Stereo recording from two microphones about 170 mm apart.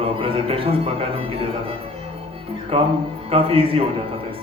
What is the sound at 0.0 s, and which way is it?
Speech, 35° right (ahead or behind).